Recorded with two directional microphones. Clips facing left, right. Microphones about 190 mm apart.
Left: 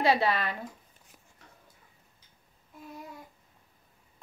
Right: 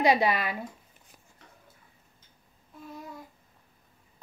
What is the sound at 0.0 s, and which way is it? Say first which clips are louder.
Speech: right 2 dB; 15° right (ahead or behind).